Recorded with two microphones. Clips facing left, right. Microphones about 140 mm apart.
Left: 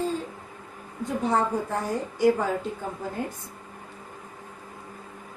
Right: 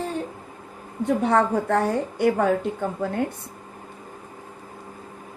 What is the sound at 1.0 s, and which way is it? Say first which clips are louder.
A woman's voice: right 5 dB; 70° right (ahead or behind).